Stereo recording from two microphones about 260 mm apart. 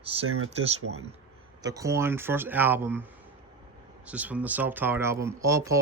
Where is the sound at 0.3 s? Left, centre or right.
Right.